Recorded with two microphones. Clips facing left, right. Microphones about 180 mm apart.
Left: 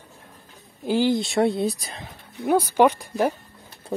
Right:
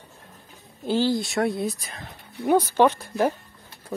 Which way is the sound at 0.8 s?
15° left (ahead or behind).